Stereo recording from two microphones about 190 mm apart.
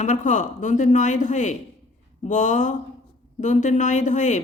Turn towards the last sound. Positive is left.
turn(degrees=40)  # may be behind; listen again after turning